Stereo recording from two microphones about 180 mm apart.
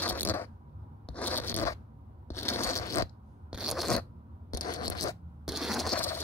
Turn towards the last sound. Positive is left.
turn(degrees=10)  # may be behind; listen again after turning